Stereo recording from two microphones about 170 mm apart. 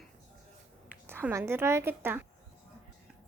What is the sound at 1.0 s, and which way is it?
A woman's voice, 15° right (ahead or behind).